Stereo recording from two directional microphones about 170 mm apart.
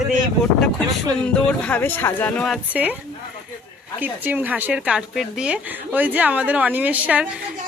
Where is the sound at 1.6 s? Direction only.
10° left (ahead or behind).